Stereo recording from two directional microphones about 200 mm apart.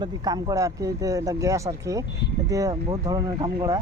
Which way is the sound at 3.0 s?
20° right (ahead or behind).